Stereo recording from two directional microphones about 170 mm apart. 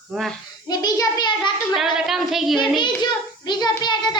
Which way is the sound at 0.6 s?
20° left (ahead or behind).